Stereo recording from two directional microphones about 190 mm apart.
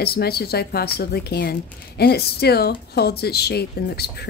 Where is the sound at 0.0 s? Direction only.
55° left (ahead or behind).